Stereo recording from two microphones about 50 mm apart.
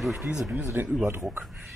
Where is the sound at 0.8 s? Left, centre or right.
Right.